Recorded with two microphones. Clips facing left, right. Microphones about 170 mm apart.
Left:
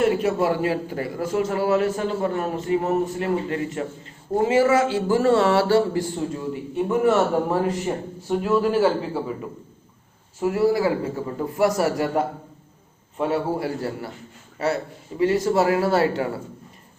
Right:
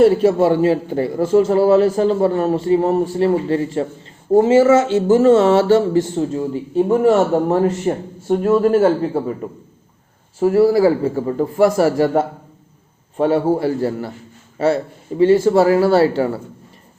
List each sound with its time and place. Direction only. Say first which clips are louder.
0.0 s a man's voice: right 8 dB; 30° right (ahead or behind)
7.9 s speech: right 7 dB; 45° right (ahead or behind)
10.4 s a man's voice: right 7 dB; 30° right (ahead or behind)
15.2 s a man's voice: right 7 dB; 30° right (ahead or behind)